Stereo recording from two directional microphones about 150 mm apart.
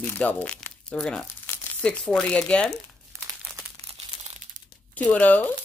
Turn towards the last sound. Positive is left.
turn(degrees=10)  # may be behind; listen again after turning